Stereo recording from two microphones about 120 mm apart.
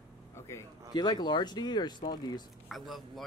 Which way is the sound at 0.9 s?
35° left (ahead or behind).